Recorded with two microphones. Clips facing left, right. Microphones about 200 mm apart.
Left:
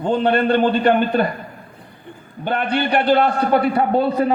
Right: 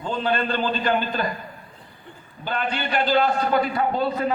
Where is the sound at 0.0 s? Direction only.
60° left (ahead or behind).